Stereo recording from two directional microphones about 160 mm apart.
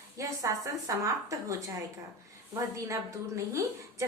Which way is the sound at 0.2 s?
20° right (ahead or behind).